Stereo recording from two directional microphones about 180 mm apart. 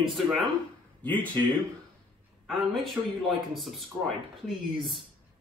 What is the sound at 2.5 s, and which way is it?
A man's voice, centre (ahead or behind).